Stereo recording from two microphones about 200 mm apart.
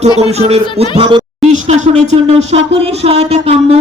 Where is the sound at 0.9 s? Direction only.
25° right (ahead or behind).